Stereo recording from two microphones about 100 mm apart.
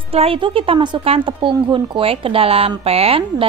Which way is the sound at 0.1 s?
75° right (ahead or behind).